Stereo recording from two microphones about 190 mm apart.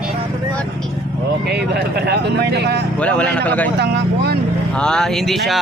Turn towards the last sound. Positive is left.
turn(degrees=0)  # may be behind; listen again after turning